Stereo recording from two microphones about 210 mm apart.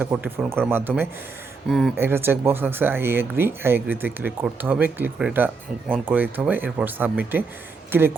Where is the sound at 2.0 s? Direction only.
10° right (ahead or behind).